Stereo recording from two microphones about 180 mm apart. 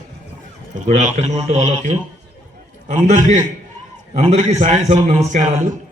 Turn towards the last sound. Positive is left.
turn(degrees=-40)  # may be behind; listen again after turning